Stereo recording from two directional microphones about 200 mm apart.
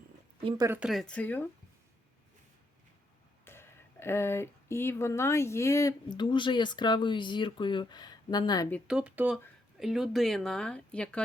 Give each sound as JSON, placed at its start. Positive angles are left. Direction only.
{"t": 0.4, "sound": "speech", "side_deg": -20}
{"t": 0.8, "sound": "speech", "side_deg": 0}
{"t": 3.4, "sound": "speech", "side_deg": 10}
{"t": 8.9, "sound": "speech", "side_deg": -5}